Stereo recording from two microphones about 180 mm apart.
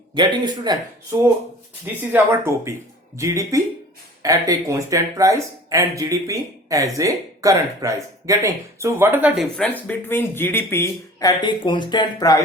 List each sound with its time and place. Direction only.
0.1 s speech: 25° right (ahead or behind)
2.1 s speech: 15° right (ahead or behind)
9.6 s speech: 10° left (ahead or behind)